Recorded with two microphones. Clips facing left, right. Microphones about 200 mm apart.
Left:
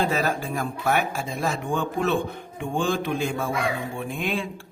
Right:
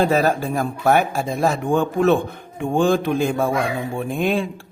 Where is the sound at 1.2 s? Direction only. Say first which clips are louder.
Right 7 dB; 50° right (ahead or behind).